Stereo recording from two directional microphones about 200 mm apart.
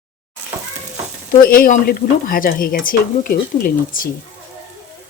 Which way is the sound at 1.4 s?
45° left (ahead or behind).